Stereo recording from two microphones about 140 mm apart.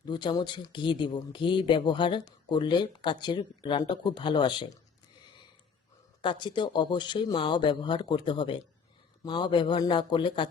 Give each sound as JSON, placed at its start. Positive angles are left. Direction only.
{"t": 0.0, "sound": "speech", "side_deg": 30}
{"t": 6.2, "sound": "speech", "side_deg": 35}